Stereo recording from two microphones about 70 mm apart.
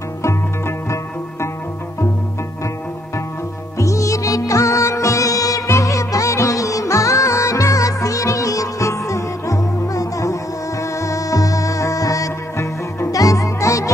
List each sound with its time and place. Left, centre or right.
0.2 s music: left
3.7 s music: left